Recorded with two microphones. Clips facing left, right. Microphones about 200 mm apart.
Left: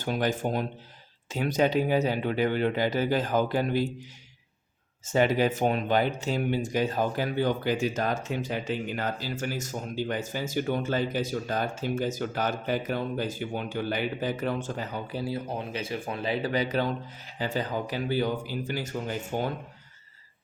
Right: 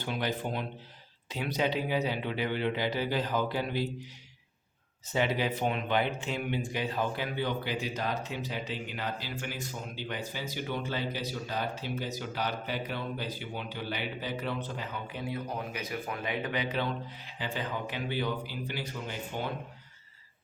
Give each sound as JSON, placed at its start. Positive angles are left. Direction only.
{"t": 0.0, "sound": "speech", "side_deg": 45}
{"t": 5.0, "sound": "speech", "side_deg": 45}